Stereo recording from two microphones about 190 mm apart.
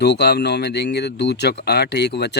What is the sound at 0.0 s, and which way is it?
Speech, 60° left (ahead or behind).